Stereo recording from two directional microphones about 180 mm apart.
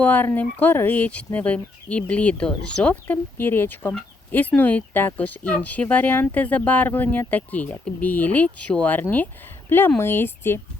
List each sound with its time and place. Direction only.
0.0 s speech: 10° left (ahead or behind)